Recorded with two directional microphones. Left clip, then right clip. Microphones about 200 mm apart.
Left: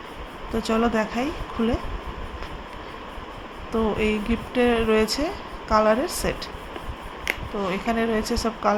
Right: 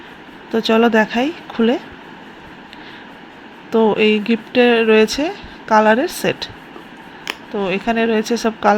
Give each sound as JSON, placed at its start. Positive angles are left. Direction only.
{"t": 0.5, "sound": "speech", "side_deg": -15}
{"t": 3.7, "sound": "speech", "side_deg": -20}
{"t": 7.3, "sound": "a sound", "side_deg": -35}
{"t": 7.7, "sound": "speech", "side_deg": -15}